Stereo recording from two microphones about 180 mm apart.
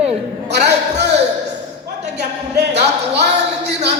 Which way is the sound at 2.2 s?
70° right (ahead or behind).